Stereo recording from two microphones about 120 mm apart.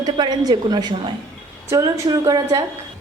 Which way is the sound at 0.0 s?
35° right (ahead or behind).